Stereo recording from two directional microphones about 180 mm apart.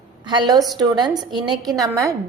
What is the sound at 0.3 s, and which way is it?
A woman's voice, 25° right (ahead or behind).